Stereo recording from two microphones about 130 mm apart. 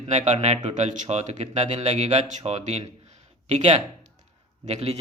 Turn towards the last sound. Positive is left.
turn(degrees=-55)  # may be behind; listen again after turning